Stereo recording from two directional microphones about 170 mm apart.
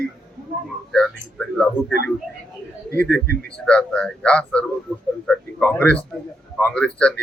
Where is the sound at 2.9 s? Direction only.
10° left (ahead or behind).